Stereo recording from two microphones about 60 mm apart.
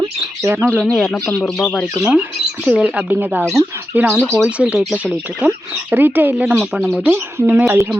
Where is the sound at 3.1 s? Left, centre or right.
Right.